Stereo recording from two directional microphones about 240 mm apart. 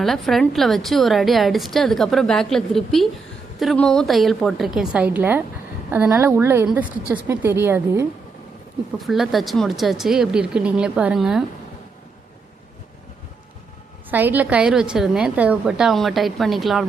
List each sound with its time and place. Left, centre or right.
0.0 s a woman's voice: centre
14.1 s a woman's voice: centre